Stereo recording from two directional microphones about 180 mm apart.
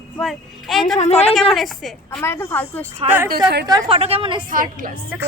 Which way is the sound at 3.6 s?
25° right (ahead or behind).